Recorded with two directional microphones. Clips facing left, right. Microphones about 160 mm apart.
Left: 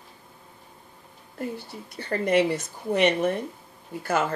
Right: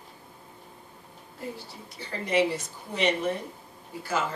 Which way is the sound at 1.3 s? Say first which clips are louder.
Left 5 dB; 55° left (ahead or behind).